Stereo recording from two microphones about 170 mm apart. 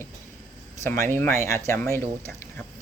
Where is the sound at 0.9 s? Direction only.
15° left (ahead or behind).